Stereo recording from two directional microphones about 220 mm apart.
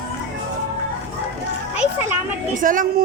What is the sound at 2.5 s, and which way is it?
Speech, 35° right (ahead or behind).